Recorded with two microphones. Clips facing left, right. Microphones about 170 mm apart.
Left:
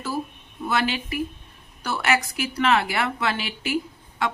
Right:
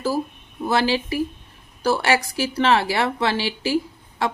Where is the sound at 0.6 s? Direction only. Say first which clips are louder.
Right 4 dB; 30° right (ahead or behind).